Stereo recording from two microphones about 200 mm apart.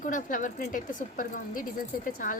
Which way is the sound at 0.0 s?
40° left (ahead or behind).